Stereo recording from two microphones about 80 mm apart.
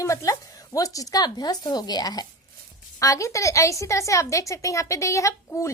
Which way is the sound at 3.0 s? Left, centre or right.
Left.